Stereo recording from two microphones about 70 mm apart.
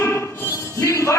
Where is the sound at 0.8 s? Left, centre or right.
Left.